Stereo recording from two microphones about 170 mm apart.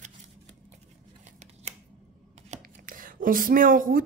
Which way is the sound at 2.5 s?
55° right (ahead or behind).